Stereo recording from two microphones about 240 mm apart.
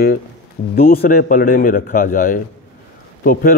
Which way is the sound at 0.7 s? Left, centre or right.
Left.